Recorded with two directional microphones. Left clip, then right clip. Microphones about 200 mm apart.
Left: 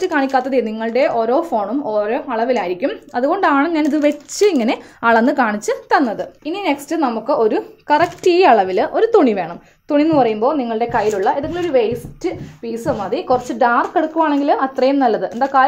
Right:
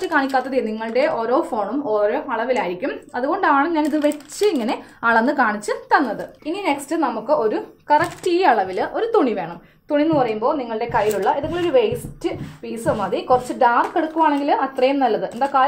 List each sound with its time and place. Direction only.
0.0 s a woman's voice: 35° left (ahead or behind)